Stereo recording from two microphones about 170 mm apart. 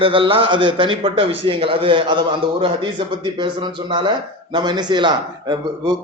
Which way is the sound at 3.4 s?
30° right (ahead or behind).